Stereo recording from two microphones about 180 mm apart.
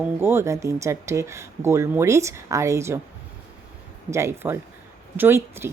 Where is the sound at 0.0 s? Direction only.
15° right (ahead or behind).